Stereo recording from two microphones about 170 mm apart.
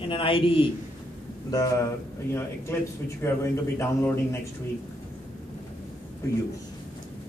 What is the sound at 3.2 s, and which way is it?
A man's voice, 15° left (ahead or behind).